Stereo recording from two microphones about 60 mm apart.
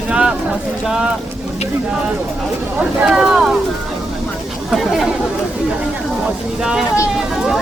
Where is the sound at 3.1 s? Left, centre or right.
Centre.